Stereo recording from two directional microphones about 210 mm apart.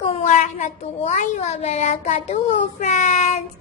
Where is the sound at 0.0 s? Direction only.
30° left (ahead or behind).